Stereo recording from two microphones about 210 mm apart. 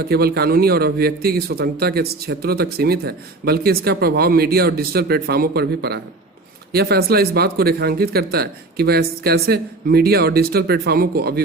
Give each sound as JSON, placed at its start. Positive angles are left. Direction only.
{"t": 0.0, "sound": "a man's voice", "side_deg": -50}